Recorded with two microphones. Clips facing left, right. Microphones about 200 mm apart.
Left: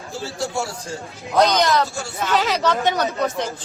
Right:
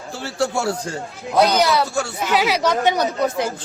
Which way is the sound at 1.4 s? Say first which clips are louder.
Right 1 dB; 5° right (ahead or behind).